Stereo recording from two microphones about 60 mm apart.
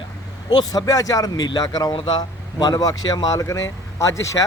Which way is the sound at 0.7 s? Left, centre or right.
Left.